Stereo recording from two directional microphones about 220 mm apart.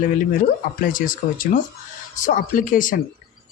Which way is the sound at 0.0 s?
40° left (ahead or behind).